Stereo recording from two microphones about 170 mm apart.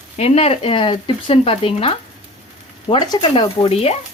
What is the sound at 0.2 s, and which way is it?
Speech, 35° left (ahead or behind).